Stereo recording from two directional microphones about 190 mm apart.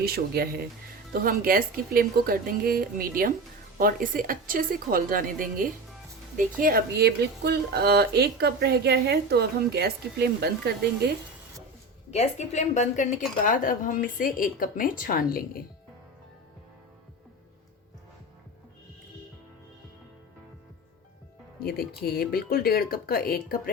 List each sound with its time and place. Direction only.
0.0 s speech: 55° right (ahead or behind)
12.1 s a woman's voice: 35° left (ahead or behind)
21.6 s a woman's voice: 55° left (ahead or behind)